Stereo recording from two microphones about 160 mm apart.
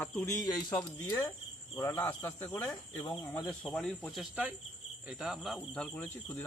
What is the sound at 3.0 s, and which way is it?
Speech, 25° left (ahead or behind).